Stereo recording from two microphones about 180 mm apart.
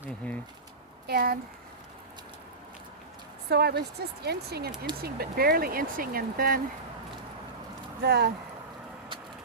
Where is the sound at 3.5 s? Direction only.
60° right (ahead or behind).